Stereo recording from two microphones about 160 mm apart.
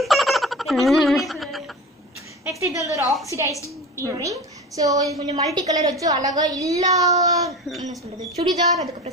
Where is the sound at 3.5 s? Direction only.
20° left (ahead or behind).